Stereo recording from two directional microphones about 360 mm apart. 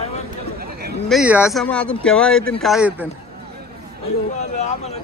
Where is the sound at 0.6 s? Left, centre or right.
Right.